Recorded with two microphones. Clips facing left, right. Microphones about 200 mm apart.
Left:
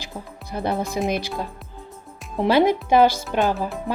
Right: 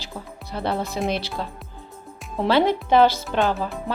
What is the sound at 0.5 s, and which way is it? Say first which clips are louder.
Speech: left 1 dB; 15° left (ahead or behind).